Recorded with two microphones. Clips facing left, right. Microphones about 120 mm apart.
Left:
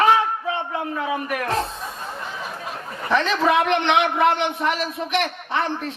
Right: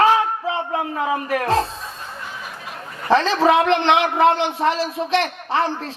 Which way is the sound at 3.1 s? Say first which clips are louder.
Right 4 dB; 30° right (ahead or behind).